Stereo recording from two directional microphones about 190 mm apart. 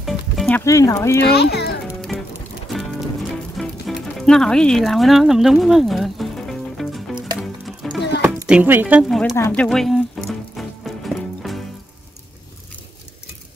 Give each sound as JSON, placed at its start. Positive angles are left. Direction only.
{"t": 0.0, "sound": "music", "side_deg": 0}
{"t": 0.6, "sound": "speech", "side_deg": 15}
{"t": 1.2, "sound": "a child's voice", "side_deg": 60}
{"t": 2.0, "sound": "music", "side_deg": 0}
{"t": 3.5, "sound": "music", "side_deg": 0}
{"t": 8.2, "sound": "speech", "side_deg": -10}
{"t": 9.4, "sound": "music", "side_deg": 5}